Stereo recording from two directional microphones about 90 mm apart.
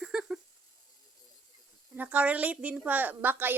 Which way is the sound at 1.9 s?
20° right (ahead or behind).